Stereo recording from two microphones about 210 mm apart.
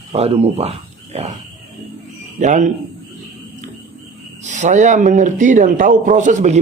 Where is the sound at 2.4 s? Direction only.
35° right (ahead or behind).